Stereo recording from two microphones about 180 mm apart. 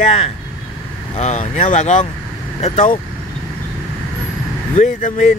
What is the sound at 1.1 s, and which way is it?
Speech, 40° left (ahead or behind).